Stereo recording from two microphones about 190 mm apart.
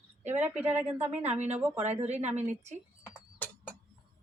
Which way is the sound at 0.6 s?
10° right (ahead or behind).